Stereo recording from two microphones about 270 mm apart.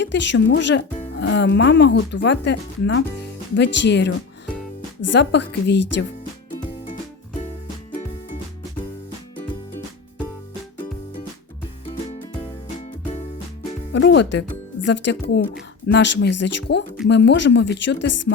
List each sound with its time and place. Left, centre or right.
0.0 s speech: left
11.9 s music: left
13.9 s music: left
14.8 s speech: left